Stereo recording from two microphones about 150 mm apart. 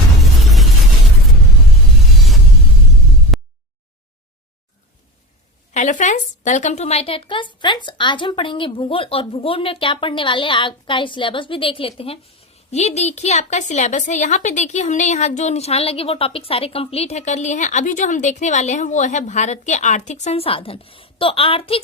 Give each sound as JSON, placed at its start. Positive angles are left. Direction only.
{"t": 0.4, "sound": "vehicle", "side_deg": 0}
{"t": 3.3, "sound": "a sound", "side_deg": 0}
{"t": 5.7, "sound": "a woman's voice", "side_deg": 55}